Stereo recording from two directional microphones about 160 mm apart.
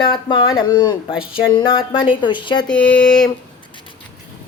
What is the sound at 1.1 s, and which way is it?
Speech, 5° right (ahead or behind).